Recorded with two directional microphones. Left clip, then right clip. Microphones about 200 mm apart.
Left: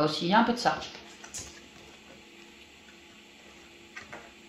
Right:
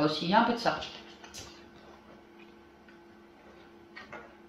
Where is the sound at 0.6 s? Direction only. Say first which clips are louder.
Left 3 dB; 45° left (ahead or behind).